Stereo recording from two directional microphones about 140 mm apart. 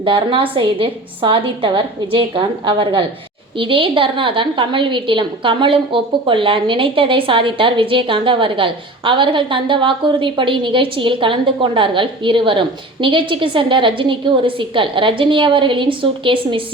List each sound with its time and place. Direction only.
0.0 s a woman's voice: 40° right (ahead or behind)